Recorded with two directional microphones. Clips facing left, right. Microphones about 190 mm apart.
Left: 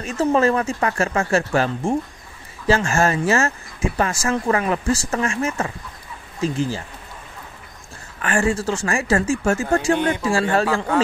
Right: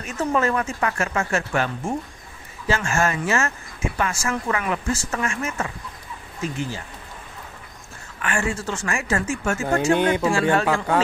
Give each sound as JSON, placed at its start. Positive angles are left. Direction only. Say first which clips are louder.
{"t": 0.0, "sound": "speech", "louder": "left 5 dB", "side_deg": 30}
{"t": 8.2, "sound": "speech", "louder": "left 5 dB", "side_deg": 35}